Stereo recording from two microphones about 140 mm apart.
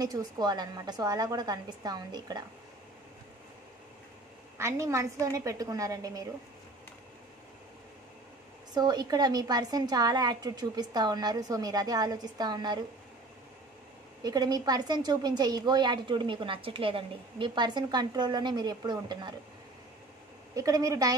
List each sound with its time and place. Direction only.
0.0 s a woman's voice: 30° right (ahead or behind)
4.6 s a woman's voice: 20° right (ahead or behind)
8.7 s a woman's voice: 30° right (ahead or behind)
14.2 s a woman's voice: 30° right (ahead or behind)
20.5 s a woman's voice: 25° right (ahead or behind)